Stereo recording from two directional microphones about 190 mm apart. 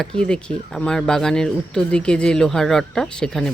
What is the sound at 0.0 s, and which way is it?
Speech, 5° left (ahead or behind).